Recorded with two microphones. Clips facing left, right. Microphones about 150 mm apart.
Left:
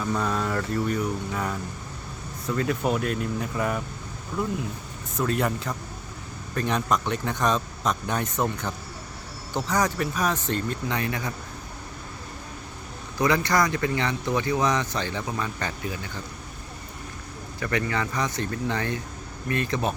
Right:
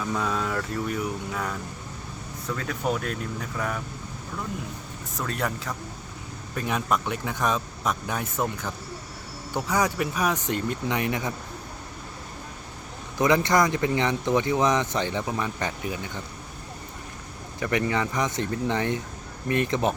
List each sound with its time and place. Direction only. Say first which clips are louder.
0.0 s speech: left 1 dB; centre (ahead or behind); by 11.3 s 20° right (ahead or behind)
13.1 s speech: right 2 dB; 20° right (ahead or behind)
17.6 s speech: right 2 dB; 20° right (ahead or behind)